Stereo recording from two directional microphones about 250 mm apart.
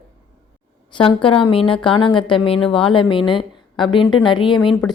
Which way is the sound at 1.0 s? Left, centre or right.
Left.